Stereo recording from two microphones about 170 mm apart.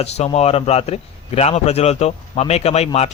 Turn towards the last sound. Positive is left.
turn(degrees=40)  # may be behind; listen again after turning